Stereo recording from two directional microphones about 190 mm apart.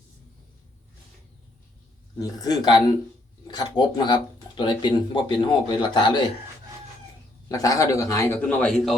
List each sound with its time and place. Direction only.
2.1 s speech: 20° left (ahead or behind)
7.4 s a man's voice: 20° left (ahead or behind); by 9.0 s 5° left (ahead or behind)